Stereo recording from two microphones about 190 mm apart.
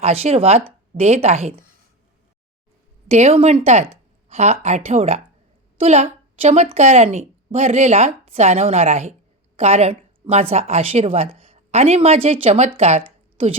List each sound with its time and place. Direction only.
0.0 s a woman's voice: 30° right (ahead or behind)
3.1 s a woman's voice: 35° right (ahead or behind)